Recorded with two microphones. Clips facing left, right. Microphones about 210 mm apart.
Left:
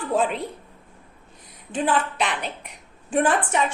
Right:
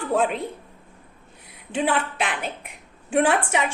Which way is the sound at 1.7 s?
65° right (ahead or behind).